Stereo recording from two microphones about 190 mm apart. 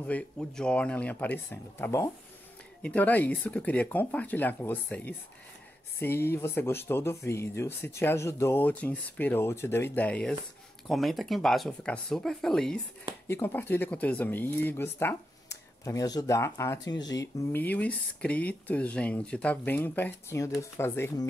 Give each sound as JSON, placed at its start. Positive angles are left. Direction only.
{"t": 0.0, "sound": "speech", "side_deg": 5}